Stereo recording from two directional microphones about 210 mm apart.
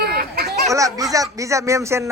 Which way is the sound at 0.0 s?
45° right (ahead or behind).